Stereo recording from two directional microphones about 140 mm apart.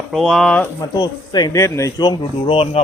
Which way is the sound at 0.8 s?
30° left (ahead or behind).